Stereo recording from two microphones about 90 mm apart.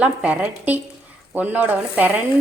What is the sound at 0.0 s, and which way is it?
Speech, 15° right (ahead or behind).